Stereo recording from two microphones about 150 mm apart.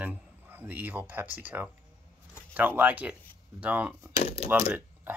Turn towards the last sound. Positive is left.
turn(degrees=-10)  # may be behind; listen again after turning